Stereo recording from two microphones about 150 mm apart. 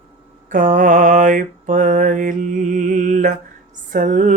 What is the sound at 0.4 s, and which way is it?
Mantra, 55° right (ahead or behind).